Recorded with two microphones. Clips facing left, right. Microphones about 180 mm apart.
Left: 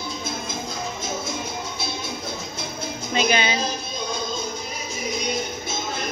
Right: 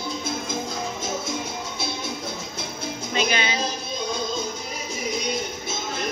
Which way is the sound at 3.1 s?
20° left (ahead or behind).